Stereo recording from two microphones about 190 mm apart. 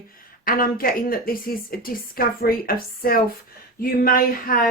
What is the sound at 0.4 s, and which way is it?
A woman's voice, 50° left (ahead or behind).